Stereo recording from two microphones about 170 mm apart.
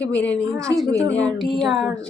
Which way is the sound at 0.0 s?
5° left (ahead or behind).